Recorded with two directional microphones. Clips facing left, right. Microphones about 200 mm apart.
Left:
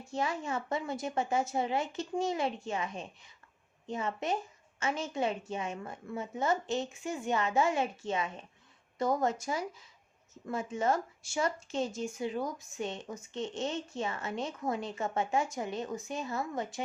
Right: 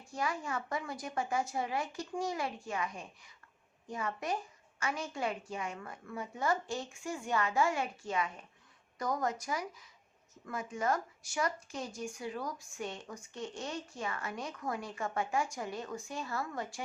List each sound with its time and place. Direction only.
0.0 s speech: 25° left (ahead or behind)